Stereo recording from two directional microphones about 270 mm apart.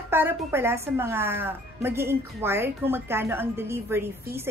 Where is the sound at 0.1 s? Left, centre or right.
Centre.